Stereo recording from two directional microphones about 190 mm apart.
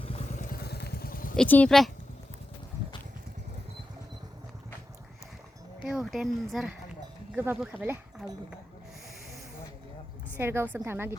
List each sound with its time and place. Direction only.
0.0 s vehicle: 30° left (ahead or behind)
0.4 s vehicle: 55° left (ahead or behind)
1.4 s speech: 5° left (ahead or behind)
5.8 s speech: centre (ahead or behind)
7.3 s a woman's voice: 10° right (ahead or behind)
10.3 s a woman's voice: 10° right (ahead or behind)